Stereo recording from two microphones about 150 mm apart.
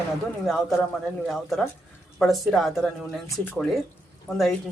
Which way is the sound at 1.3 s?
Centre (ahead or behind).